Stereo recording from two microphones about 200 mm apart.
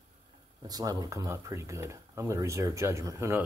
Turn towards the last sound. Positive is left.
turn(degrees=-15)  # may be behind; listen again after turning